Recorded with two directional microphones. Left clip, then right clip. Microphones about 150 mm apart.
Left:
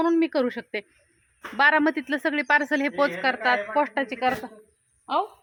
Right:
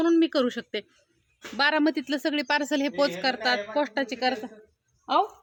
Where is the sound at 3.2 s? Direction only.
30° right (ahead or behind).